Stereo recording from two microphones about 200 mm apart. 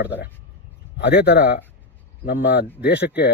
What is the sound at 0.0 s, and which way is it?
Speech, 60° left (ahead or behind).